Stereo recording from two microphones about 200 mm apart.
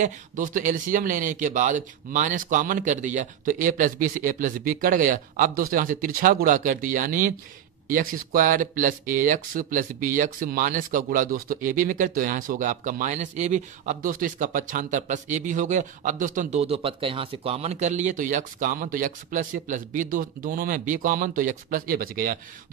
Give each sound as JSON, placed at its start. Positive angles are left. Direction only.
{"t": 0.0, "sound": "speech", "side_deg": -40}